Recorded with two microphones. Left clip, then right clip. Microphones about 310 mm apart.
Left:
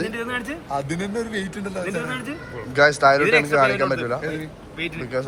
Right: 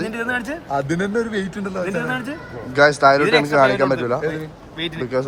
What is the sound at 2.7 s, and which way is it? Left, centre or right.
Speech, centre.